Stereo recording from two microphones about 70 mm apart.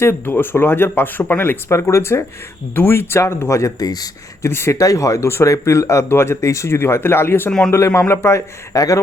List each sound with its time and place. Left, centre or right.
0.0 s speech: left
3.8 s speech: left
4.4 s speech: left
4.8 s speech: left
7.7 s speech: left